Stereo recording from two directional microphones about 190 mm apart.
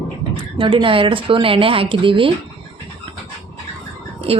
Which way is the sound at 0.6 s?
25° right (ahead or behind).